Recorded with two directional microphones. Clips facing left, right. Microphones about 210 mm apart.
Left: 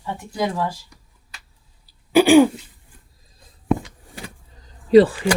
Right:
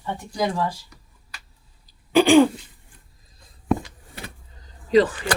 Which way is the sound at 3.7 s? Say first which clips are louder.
Left 2 dB; centre (ahead or behind).